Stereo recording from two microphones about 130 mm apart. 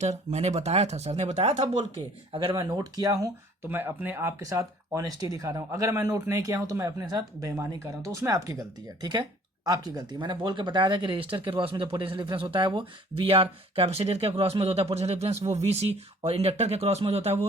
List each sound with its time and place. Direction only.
0.0 s speech: 60° right (ahead or behind); by 2.6 s 45° right (ahead or behind)
2.6 s speech: 30° right (ahead or behind); by 17.4 s 55° right (ahead or behind)